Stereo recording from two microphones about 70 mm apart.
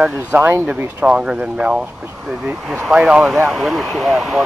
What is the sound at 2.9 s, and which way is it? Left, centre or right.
Speech, centre.